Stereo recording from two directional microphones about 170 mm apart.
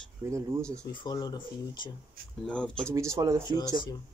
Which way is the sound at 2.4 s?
5° left (ahead or behind).